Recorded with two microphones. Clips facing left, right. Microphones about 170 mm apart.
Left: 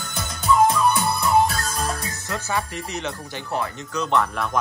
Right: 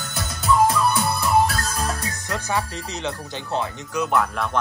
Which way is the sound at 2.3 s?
15° right (ahead or behind).